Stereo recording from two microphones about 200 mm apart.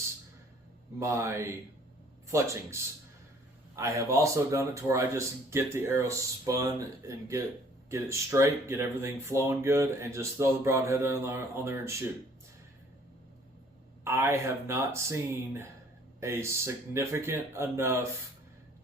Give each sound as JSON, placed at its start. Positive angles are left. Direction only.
{"t": 0.9, "sound": "speech", "side_deg": -15}
{"t": 14.0, "sound": "speech", "side_deg": -15}